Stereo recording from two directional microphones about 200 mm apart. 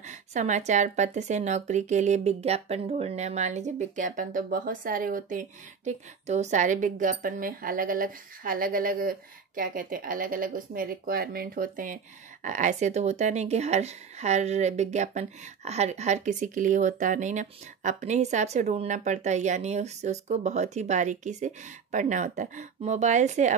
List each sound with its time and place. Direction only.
0.0 s speech: 35° right (ahead or behind)